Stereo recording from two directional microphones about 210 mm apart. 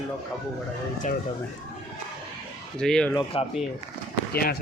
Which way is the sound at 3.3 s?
25° left (ahead or behind).